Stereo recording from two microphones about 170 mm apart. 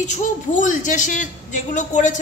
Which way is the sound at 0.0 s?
45° left (ahead or behind).